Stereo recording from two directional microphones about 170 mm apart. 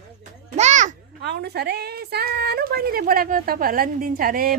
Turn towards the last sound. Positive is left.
turn(degrees=-55)  # may be behind; listen again after turning